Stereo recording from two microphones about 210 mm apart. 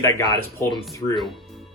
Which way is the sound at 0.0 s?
15° left (ahead or behind).